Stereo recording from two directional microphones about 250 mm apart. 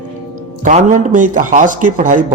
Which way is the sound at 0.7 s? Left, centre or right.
Right.